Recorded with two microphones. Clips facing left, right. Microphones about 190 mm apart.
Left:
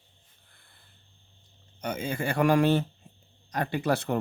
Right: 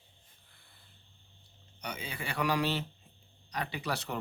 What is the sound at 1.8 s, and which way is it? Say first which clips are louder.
Speech: left 10 dB; 50° left (ahead or behind).